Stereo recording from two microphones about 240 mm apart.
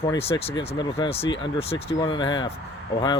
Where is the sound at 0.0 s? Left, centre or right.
Left.